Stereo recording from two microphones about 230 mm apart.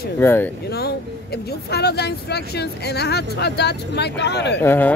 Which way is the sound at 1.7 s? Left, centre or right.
Left.